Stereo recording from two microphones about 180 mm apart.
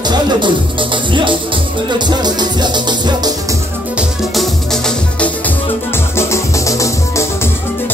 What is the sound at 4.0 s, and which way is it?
Music, centre (ahead or behind).